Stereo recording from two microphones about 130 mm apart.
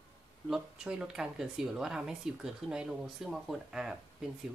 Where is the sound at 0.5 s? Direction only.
5° right (ahead or behind).